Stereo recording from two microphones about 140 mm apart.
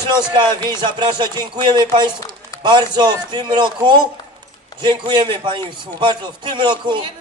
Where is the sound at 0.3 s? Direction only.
30° right (ahead or behind).